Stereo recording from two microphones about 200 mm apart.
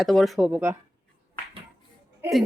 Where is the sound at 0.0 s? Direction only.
Centre (ahead or behind).